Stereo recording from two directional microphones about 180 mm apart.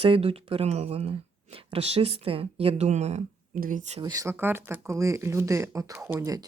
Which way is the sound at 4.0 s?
20° right (ahead or behind).